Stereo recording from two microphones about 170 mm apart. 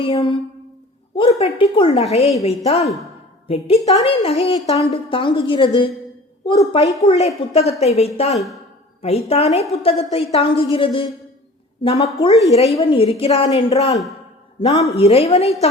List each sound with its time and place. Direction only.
0.0 s a woman's voice: 30° left (ahead or behind)